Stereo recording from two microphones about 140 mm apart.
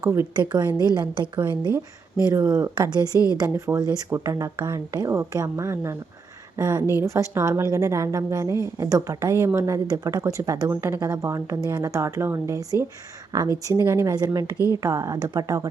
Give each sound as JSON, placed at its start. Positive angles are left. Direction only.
{"t": 0.0, "sound": "a woman's voice", "side_deg": -20}
{"t": 0.3, "sound": "a woman's voice", "side_deg": -30}